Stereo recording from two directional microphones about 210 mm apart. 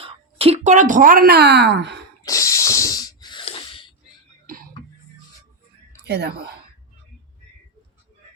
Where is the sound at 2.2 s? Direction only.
15° left (ahead or behind).